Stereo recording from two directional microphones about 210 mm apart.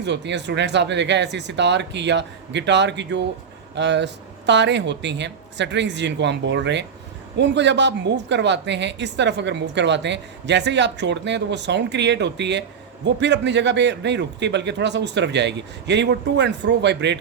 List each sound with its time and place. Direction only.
0.0 s a woman's voice: 55° right (ahead or behind)